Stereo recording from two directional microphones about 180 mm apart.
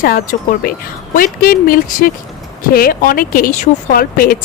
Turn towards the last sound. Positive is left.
turn(degrees=50)  # may be behind; listen again after turning